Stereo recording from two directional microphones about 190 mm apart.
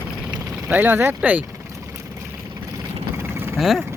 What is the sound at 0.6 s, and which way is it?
Vehicle, 10° right (ahead or behind).